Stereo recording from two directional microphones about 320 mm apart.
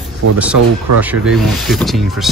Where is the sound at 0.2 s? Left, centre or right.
Right.